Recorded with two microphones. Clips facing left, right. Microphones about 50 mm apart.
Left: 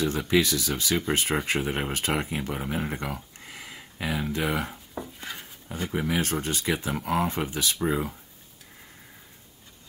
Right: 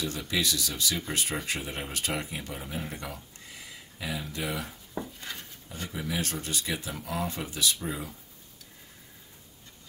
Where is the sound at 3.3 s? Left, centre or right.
Left.